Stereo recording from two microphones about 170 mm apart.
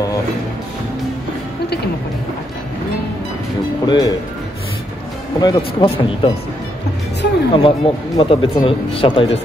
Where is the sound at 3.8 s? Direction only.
25° left (ahead or behind).